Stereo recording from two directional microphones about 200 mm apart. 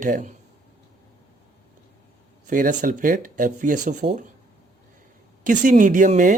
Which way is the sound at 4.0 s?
55° right (ahead or behind).